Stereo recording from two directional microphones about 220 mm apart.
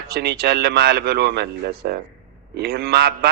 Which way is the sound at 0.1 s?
45° right (ahead or behind).